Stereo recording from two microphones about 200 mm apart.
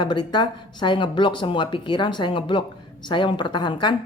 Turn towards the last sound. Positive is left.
turn(degrees=20)  # may be behind; listen again after turning